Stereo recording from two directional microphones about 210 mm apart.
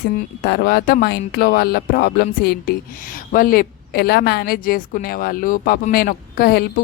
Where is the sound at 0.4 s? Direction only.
50° left (ahead or behind).